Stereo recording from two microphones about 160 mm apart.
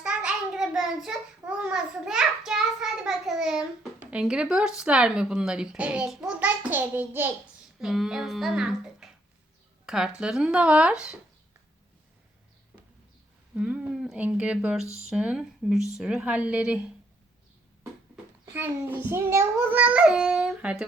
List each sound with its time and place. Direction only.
0.0 s child singing: 5° right (ahead or behind)
4.0 s speech: 5° right (ahead or behind)
9.8 s a sound: 5° right (ahead or behind)
10.2 s speech: 5° right (ahead or behind)
13.6 s a child's voice: 5° right (ahead or behind)
18.4 s a child's voice: 10° right (ahead or behind)